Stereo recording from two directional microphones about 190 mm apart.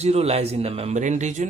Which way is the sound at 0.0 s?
35° right (ahead or behind).